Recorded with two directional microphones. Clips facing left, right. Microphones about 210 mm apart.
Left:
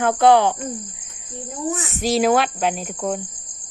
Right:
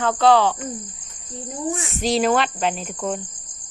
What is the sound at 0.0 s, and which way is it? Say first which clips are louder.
Speech: left 2 dB; 15° left (ahead or behind).